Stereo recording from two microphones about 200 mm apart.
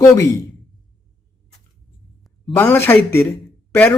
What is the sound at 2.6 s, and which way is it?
A man's voice, 10° left (ahead or behind).